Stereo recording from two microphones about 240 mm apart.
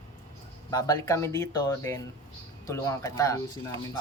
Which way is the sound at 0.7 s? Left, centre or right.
Centre.